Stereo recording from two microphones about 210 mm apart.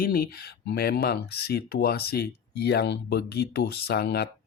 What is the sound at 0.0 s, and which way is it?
Speech, 45° left (ahead or behind).